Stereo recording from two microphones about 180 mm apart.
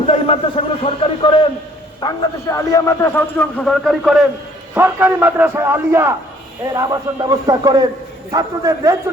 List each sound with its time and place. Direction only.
0.1 s a man's voice: 35° left (ahead or behind)
2.0 s a man's voice: 20° left (ahead or behind); by 4.3 s centre (ahead or behind)
4.7 s a man's voice: 10° right (ahead or behind)